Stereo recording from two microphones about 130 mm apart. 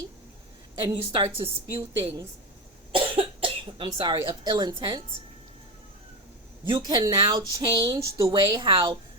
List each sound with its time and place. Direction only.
0.9 s a woman's voice: 30° right (ahead or behind)
1.4 s a woman's voice: 45° right (ahead or behind)
2.9 s cough: 40° right (ahead or behind)
3.9 s speech: 40° right (ahead or behind)
6.7 s speech: 35° right (ahead or behind)